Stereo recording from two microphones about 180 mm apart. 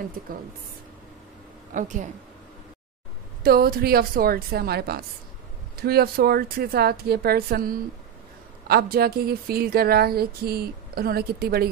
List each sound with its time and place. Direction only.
1.7 s a woman's voice: 45° right (ahead or behind)
3.4 s speech: 55° right (ahead or behind)